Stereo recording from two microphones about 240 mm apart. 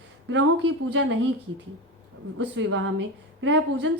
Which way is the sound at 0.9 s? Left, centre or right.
Right.